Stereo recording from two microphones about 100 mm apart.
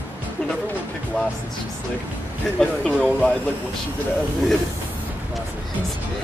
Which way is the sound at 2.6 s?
5° left (ahead or behind).